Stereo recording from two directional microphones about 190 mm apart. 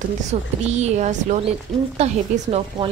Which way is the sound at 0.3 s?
35° right (ahead or behind).